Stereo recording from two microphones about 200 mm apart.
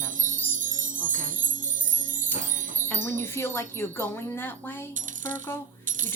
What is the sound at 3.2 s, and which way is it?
Speech, 10° left (ahead or behind).